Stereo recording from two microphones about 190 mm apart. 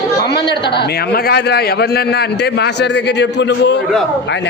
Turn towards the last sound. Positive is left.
turn(degrees=65)  # may be behind; listen again after turning